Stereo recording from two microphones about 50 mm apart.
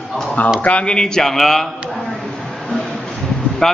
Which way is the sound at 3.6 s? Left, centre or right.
Centre.